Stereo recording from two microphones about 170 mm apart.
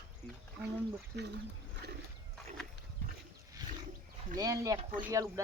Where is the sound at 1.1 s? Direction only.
80° right.